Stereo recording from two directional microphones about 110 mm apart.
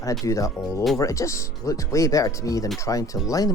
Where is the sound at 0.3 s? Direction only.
30° left (ahead or behind).